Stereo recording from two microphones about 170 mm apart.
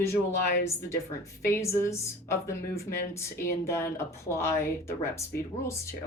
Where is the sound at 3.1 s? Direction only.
15° left (ahead or behind).